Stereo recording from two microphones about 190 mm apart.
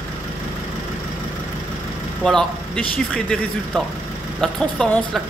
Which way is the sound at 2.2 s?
5° left (ahead or behind).